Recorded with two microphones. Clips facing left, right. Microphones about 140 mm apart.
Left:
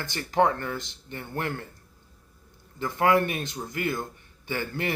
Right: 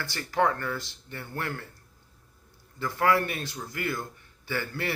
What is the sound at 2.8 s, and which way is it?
Speech, 20° left (ahead or behind).